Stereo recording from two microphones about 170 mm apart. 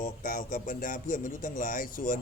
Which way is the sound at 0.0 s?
50° left (ahead or behind).